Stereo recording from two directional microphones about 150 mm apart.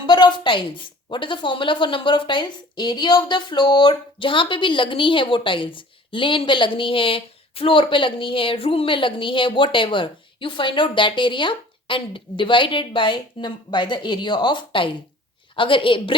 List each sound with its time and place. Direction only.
0.0 s a woman's voice: 30° left (ahead or behind)